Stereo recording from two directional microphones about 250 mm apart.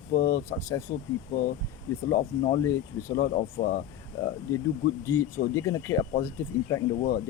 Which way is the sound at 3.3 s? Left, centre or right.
Left.